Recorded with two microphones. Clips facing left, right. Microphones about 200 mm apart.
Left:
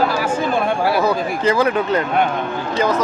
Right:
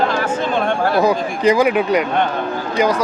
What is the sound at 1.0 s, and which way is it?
Speech, 15° right (ahead or behind).